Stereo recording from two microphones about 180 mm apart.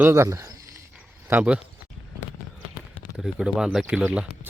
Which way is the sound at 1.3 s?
10° right (ahead or behind).